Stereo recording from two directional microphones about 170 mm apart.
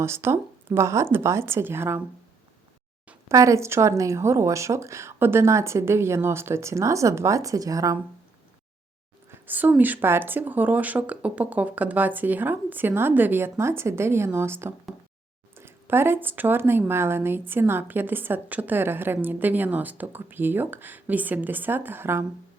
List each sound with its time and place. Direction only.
0.0 s a woman's voice: 15° right (ahead or behind)
3.1 s a woman's voice: 15° right (ahead or behind)
9.3 s a woman's voice: 10° right (ahead or behind)